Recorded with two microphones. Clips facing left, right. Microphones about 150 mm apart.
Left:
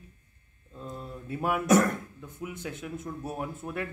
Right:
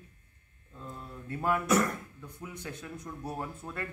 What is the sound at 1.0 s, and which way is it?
A man's voice, 15° left (ahead or behind).